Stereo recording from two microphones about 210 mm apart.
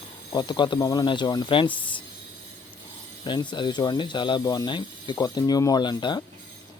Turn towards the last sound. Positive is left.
turn(degrees=20)  # may be behind; listen again after turning